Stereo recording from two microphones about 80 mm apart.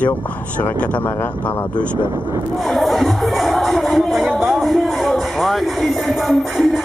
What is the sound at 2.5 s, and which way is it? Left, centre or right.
Speech, centre.